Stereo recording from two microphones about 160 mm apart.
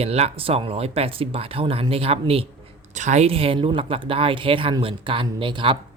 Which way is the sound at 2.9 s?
50° right (ahead or behind).